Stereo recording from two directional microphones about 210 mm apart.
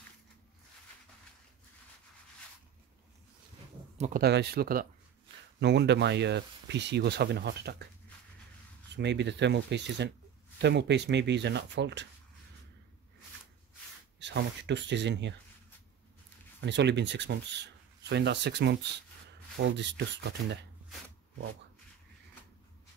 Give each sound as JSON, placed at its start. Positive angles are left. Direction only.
{"t": 4.0, "sound": "speech", "side_deg": -45}
{"t": 8.9, "sound": "speech", "side_deg": -55}
{"t": 14.2, "sound": "speech", "side_deg": -55}
{"t": 16.6, "sound": "speech", "side_deg": -55}